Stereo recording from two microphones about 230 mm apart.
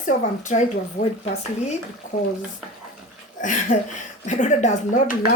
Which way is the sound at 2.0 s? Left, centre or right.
Left.